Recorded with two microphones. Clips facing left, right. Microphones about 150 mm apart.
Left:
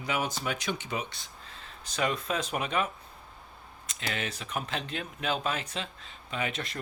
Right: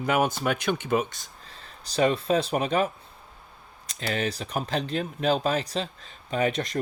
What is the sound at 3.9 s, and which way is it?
Speech, 35° right (ahead or behind).